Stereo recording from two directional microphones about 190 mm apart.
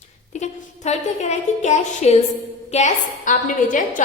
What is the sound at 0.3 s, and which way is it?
A woman's voice, 35° left (ahead or behind).